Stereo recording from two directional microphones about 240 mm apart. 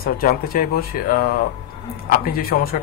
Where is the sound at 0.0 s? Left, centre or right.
Left.